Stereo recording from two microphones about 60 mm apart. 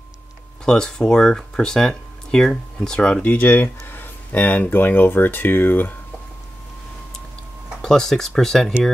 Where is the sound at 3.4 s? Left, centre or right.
Left.